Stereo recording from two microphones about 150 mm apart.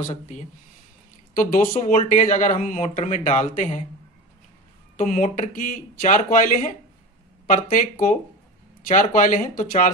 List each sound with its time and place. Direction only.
1.3 s speech: 70° left (ahead or behind)
1.7 s speech: 50° left (ahead or behind)
4.9 s speech: 60° left (ahead or behind)